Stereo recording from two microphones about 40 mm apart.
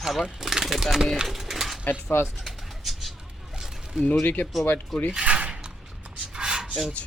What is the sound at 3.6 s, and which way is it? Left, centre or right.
Zipper, centre.